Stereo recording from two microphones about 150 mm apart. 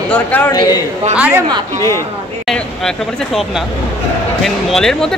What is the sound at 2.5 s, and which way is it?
Speech, 5° left (ahead or behind).